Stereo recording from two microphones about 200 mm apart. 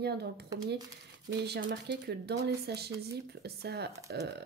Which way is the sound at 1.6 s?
60° right (ahead or behind).